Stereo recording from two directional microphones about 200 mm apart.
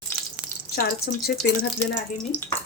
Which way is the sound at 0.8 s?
50° left (ahead or behind).